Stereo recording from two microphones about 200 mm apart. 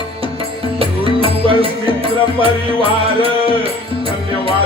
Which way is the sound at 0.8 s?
25° right (ahead or behind).